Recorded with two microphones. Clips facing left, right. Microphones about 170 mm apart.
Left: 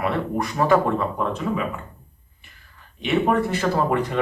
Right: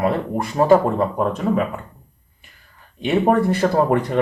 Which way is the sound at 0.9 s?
45° right (ahead or behind).